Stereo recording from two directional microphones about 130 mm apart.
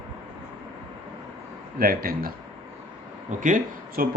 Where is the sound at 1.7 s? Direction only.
90° right.